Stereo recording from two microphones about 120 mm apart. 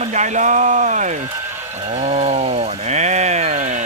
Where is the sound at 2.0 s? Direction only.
65° right (ahead or behind); by 3.8 s 85° right.